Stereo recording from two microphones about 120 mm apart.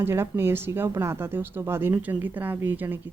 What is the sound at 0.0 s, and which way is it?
A woman's voice, 20° right (ahead or behind).